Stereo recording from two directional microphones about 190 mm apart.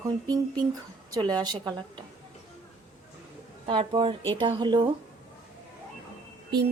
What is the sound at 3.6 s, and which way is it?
Speech, 25° right (ahead or behind).